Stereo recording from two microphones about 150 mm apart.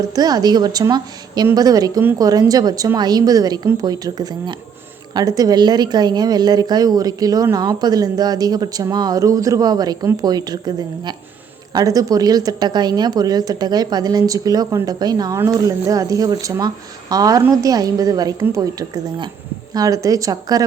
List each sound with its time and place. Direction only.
0.1 s speech: 25° right (ahead or behind)